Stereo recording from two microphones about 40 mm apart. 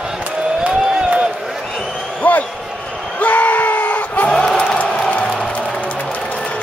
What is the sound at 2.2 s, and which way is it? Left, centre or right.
Basketball bounce, left.